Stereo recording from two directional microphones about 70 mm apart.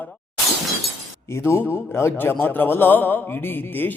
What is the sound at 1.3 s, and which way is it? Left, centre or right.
A man's voice, left.